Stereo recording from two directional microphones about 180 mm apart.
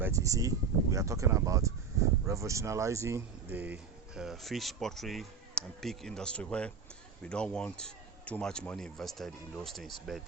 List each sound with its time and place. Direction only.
0.0 s speech: 15° right (ahead or behind); by 10.2 s centre (ahead or behind)